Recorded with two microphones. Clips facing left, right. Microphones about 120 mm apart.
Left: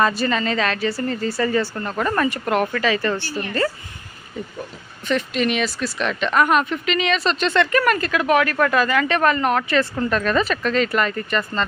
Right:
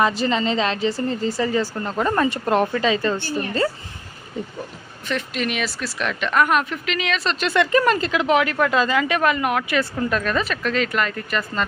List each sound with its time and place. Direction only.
0.0 s speech: 20° right (ahead or behind)
5.0 s speech: centre (ahead or behind)
7.7 s speech: 25° right (ahead or behind)
9.1 s speech: 5° right (ahead or behind)